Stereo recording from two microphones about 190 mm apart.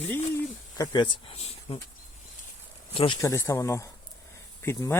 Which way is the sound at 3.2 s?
15° left (ahead or behind).